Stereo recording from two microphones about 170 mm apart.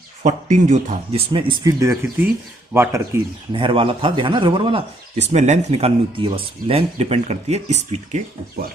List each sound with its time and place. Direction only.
0.2 s speech: 45° right (ahead or behind)
1.3 s speech: 30° right (ahead or behind)
3.5 s speech: 30° right (ahead or behind)
5.1 s speech: 40° right (ahead or behind)